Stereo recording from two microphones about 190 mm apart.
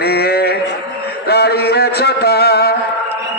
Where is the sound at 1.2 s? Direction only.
55° left (ahead or behind).